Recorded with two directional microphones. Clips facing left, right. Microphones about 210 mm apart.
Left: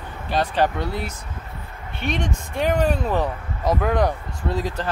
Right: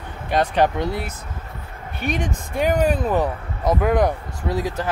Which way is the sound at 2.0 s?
5° right (ahead or behind).